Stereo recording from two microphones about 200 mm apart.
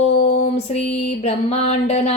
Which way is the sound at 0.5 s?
30° left (ahead or behind).